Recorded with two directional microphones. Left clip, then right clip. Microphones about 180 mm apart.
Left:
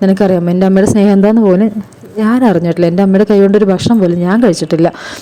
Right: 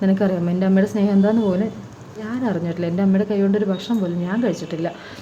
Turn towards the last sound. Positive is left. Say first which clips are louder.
# left 13 dB
turn(degrees=45)  # may be behind; listen again after turning